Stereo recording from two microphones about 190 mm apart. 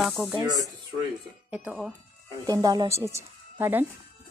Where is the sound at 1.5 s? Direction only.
5° right (ahead or behind).